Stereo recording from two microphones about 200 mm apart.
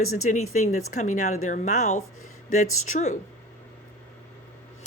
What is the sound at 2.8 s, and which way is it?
Speech, 35° left (ahead or behind).